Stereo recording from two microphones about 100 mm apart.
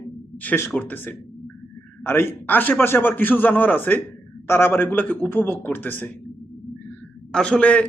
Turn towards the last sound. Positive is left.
turn(degrees=15)  # may be behind; listen again after turning